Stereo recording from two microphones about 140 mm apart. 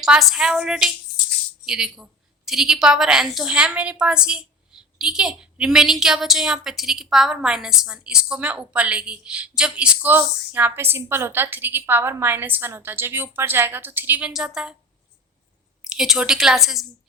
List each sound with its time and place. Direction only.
0.0 s a woman's voice: centre (ahead or behind)
15.8 s a woman's voice: 5° right (ahead or behind)